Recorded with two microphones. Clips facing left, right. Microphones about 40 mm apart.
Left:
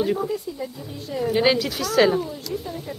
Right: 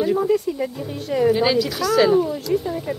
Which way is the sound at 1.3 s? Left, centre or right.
Centre.